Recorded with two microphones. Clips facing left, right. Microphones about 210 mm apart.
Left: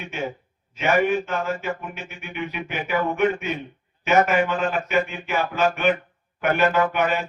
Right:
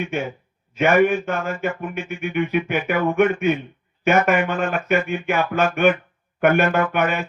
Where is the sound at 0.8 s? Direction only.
55° right (ahead or behind).